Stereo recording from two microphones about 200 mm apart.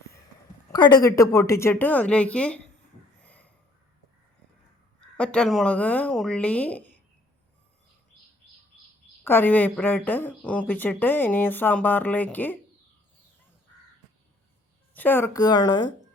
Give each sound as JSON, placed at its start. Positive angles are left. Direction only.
{"t": 0.7, "sound": "speech", "side_deg": 20}
{"t": 3.2, "sound": "a sound", "side_deg": 5}
{"t": 5.1, "sound": "speech", "side_deg": 5}
{"t": 9.2, "sound": "speech", "side_deg": 10}
{"t": 14.9, "sound": "speech", "side_deg": 10}